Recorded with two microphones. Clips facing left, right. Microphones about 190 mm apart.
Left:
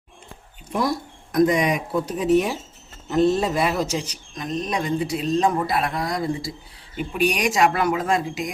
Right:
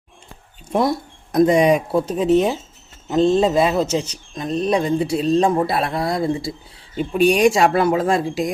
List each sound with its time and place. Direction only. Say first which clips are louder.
0.7 s speech: right 5 dB; 25° right (ahead or behind)